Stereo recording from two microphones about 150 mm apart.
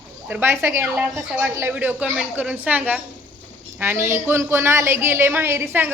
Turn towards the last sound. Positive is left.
turn(degrees=-15)  # may be behind; listen again after turning